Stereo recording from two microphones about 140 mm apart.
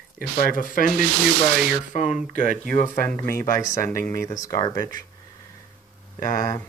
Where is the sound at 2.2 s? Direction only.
90° right.